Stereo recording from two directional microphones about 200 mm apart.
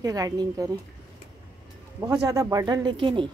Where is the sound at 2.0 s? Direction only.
15° right (ahead or behind).